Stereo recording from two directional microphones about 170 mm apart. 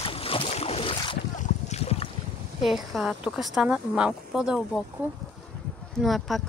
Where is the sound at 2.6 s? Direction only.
Centre (ahead or behind).